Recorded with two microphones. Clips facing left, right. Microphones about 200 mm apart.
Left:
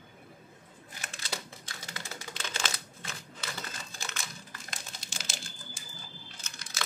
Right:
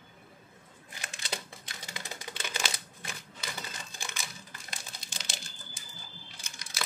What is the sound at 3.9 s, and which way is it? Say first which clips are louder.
Typing: left 1 dB; 15° right (ahead or behind).